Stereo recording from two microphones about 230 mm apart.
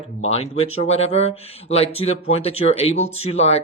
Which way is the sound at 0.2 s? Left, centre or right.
Left.